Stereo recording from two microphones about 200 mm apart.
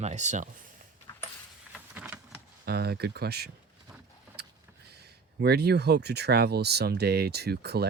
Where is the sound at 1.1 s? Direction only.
25° left (ahead or behind).